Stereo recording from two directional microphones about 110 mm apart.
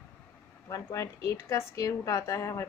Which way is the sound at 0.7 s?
30° left (ahead or behind).